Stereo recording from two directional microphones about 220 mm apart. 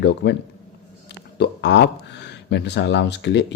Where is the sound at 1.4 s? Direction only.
50° left (ahead or behind).